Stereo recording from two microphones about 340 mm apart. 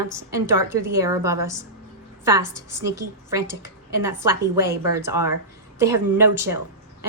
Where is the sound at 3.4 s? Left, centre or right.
Left.